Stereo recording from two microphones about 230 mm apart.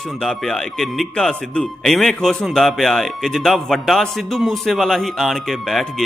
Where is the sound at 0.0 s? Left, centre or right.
Centre.